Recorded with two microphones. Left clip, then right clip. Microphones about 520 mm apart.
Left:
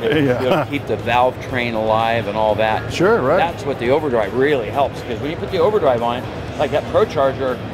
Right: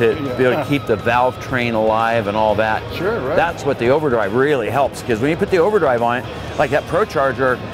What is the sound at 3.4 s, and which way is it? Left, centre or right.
Speech, right.